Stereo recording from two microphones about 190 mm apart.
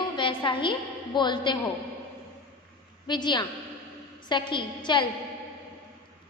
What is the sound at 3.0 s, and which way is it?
A woman's voice, 25° left (ahead or behind).